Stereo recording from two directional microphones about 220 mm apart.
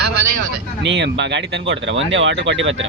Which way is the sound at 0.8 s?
55° right (ahead or behind).